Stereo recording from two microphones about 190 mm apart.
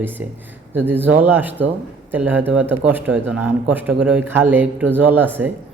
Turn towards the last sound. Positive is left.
turn(degrees=-10)  # may be behind; listen again after turning